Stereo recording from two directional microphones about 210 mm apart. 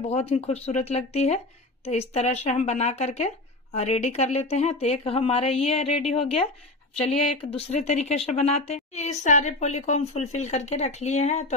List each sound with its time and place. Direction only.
0.0 s a woman's voice: 30° left (ahead or behind)